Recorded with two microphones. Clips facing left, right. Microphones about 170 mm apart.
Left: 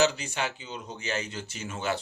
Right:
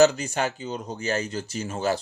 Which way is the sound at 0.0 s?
45° right (ahead or behind).